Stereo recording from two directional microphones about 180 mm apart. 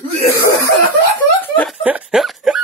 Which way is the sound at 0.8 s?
10° left (ahead or behind).